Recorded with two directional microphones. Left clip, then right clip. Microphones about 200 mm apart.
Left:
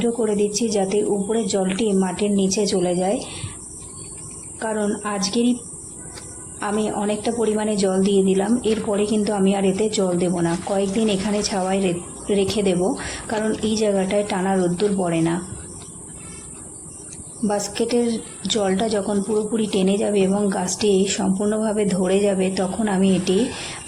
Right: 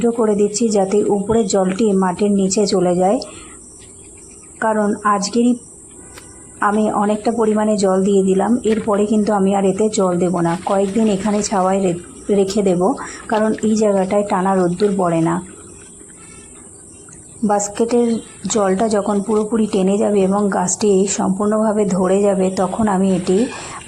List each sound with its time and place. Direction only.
0.2 s a woman's voice: 20° right (ahead or behind)
4.6 s speech: 15° right (ahead or behind)
6.6 s a woman's voice: 15° right (ahead or behind)
14.4 s speech: 10° right (ahead or behind)
17.5 s a woman's voice: 15° right (ahead or behind)
21.4 s speech: centre (ahead or behind)
21.9 s speech: 10° right (ahead or behind)